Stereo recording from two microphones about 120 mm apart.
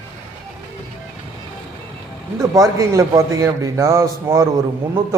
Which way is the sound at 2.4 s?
30° right (ahead or behind).